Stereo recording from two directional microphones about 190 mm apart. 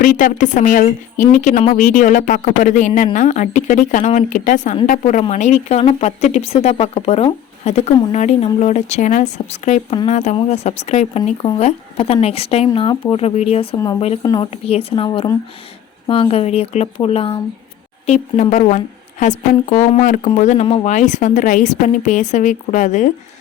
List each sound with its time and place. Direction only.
0.0 s a woman's voice: 45° left (ahead or behind)